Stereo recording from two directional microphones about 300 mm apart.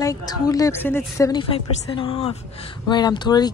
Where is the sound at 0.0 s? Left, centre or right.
Centre.